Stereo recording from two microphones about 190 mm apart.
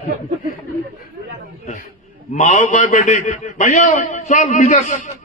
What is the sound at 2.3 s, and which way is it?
A man's voice, 40° left (ahead or behind).